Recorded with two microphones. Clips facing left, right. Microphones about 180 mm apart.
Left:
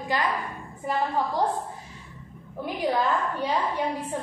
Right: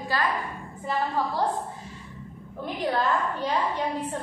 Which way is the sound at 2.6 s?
10° left (ahead or behind).